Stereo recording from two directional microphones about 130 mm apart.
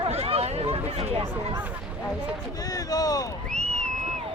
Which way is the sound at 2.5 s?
30° left (ahead or behind).